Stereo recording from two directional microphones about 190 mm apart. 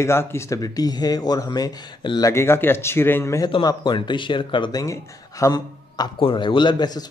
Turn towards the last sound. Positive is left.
turn(degrees=20)  # may be behind; listen again after turning